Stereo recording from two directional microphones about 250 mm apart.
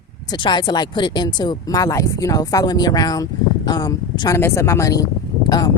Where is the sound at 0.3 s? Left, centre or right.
Centre.